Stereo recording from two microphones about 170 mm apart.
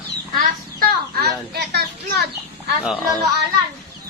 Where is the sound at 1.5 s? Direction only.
75° right (ahead or behind).